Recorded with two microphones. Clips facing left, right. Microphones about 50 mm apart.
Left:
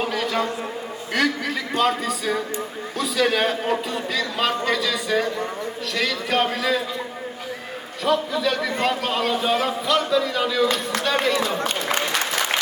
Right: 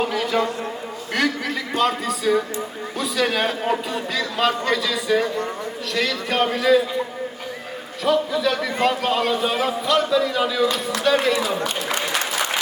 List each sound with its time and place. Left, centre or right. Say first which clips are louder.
0.0 s a man's voice: right 2 dB; centre
8.0 s a man's voice: right 2 dB; centre